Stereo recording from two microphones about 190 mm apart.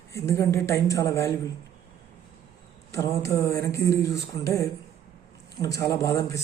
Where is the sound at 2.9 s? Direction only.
15° left (ahead or behind).